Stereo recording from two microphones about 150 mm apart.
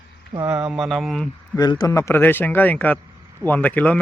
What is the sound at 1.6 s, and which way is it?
Speech, 25° left (ahead or behind).